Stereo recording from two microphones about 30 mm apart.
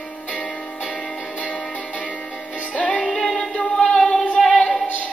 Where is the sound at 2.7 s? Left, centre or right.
Left.